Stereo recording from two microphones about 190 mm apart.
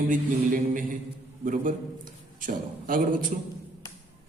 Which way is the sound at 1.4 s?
45° right (ahead or behind).